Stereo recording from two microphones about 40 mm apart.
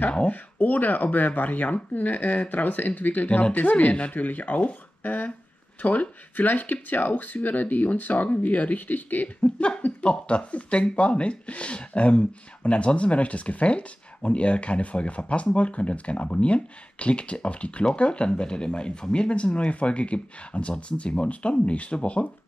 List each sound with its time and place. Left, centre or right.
0.3 s speech: left
9.4 s speech: left